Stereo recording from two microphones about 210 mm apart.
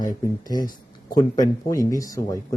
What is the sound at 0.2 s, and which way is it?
Speech, 20° left (ahead or behind).